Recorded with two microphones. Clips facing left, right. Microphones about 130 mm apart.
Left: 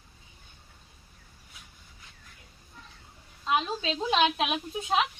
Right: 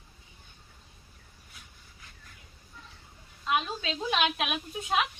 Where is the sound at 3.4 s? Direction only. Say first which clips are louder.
Left 2 dB; 30° left (ahead or behind).